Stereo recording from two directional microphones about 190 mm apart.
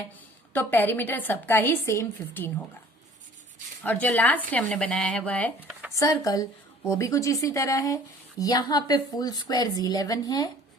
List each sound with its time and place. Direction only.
0.5 s speech: 10° left (ahead or behind)
3.8 s a woman's voice: 10° left (ahead or behind)